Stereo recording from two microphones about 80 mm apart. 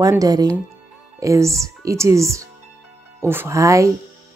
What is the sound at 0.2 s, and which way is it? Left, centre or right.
Speech, right.